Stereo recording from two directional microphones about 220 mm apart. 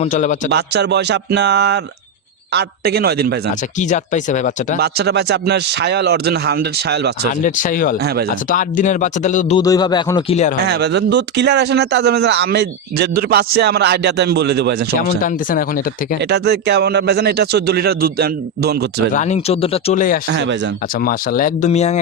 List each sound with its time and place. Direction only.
0.0 s speech: 35° left (ahead or behind)
0.5 s speech: 50° right (ahead or behind)
3.8 s speech: 35° left (ahead or behind)
4.8 s speech: 45° right (ahead or behind)
7.4 s speech: 35° left (ahead or behind)
7.9 s speech: 45° right (ahead or behind)
8.4 s speech: 35° left (ahead or behind)
9.6 s speech: 15° left (ahead or behind)
10.7 s speech: 50° right (ahead or behind)
14.9 s speech: 35° left (ahead or behind)
16.2 s speech: 50° right (ahead or behind)
19.1 s speech: 30° left (ahead or behind)
20.2 s speech: 55° right (ahead or behind)
20.9 s speech: 40° left (ahead or behind)